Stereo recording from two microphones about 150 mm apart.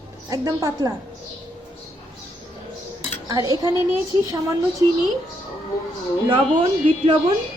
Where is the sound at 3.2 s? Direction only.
25° right (ahead or behind).